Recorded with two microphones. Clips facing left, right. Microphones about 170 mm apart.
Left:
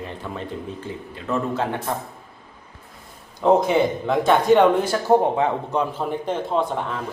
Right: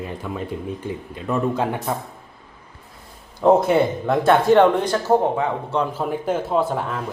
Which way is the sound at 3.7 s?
5° right (ahead or behind).